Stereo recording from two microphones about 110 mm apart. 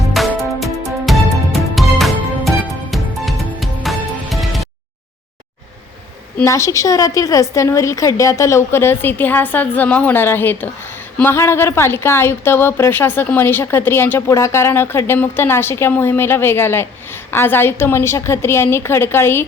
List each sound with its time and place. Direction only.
0.1 s music: centre (ahead or behind)
6.4 s a woman's voice: 30° left (ahead or behind)